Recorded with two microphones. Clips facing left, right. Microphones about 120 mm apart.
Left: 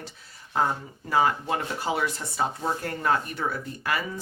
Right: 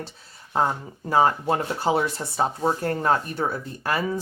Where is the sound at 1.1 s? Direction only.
35° right (ahead or behind).